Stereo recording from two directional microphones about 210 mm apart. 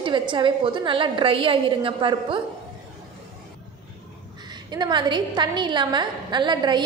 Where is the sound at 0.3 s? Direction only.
20° right (ahead or behind).